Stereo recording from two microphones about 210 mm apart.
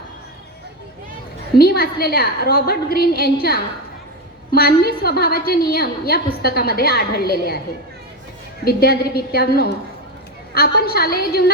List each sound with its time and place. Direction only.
1.5 s a woman's voice: 45° left (ahead or behind)
4.5 s a woman's voice: 45° left (ahead or behind)
8.6 s a woman's voice: 45° left (ahead or behind)